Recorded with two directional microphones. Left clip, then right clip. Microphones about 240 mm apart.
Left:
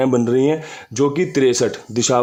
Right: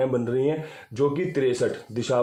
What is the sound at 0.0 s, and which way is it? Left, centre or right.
Speech, left.